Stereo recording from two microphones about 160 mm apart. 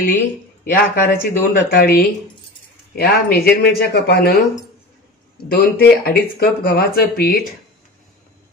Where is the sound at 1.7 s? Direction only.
75° left (ahead or behind).